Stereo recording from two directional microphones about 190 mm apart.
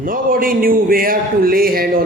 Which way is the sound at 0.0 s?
50° right (ahead or behind).